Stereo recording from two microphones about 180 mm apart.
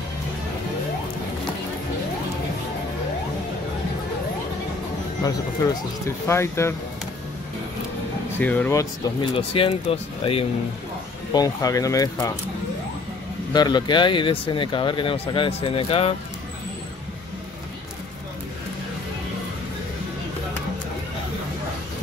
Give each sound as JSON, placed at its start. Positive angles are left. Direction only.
{"t": 5.6, "sound": "speech", "side_deg": 20}
{"t": 8.4, "sound": "speech", "side_deg": 10}
{"t": 9.5, "sound": "speech", "side_deg": 30}
{"t": 11.3, "sound": "speech", "side_deg": 20}
{"t": 13.5, "sound": "speech", "side_deg": 25}